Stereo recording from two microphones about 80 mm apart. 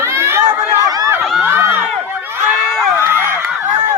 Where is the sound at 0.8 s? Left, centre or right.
Right.